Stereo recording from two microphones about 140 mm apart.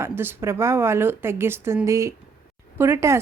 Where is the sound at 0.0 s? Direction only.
15° right (ahead or behind).